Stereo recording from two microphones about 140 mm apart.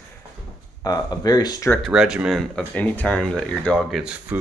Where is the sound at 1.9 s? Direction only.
5° right (ahead or behind).